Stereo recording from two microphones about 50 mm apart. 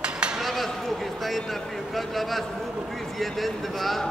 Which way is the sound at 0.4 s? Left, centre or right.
Centre.